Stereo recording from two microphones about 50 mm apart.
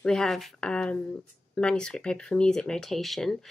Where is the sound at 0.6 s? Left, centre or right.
Left.